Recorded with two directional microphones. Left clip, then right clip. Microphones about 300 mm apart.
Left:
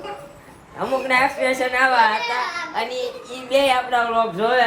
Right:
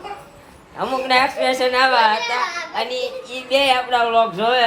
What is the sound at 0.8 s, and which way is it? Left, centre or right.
A child's voice, centre.